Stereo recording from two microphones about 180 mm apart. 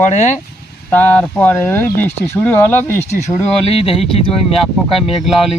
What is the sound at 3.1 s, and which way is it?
Speech, 35° left (ahead or behind).